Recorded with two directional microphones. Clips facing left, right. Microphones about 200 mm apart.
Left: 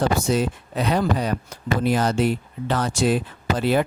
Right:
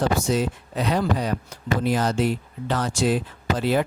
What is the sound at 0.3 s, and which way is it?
Speech, 60° left (ahead or behind).